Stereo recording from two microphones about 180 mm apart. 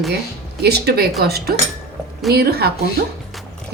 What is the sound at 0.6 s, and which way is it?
Speech, 65° right (ahead or behind).